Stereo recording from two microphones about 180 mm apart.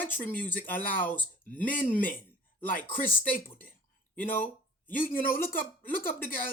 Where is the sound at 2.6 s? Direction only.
50° left (ahead or behind).